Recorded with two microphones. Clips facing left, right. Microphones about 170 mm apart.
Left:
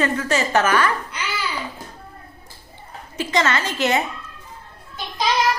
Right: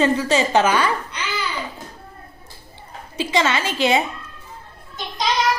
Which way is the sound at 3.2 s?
10° right (ahead or behind).